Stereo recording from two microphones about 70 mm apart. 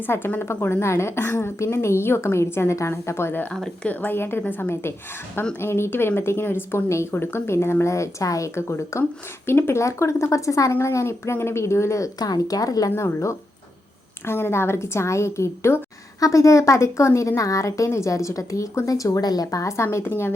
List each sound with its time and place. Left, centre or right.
0.0 s a woman's voice: left
4.7 s a woman's voice: left
6.8 s a woman's voice: left
8.5 s a woman's voice: left
12.2 s speech: left
13.0 s a woman's voice: left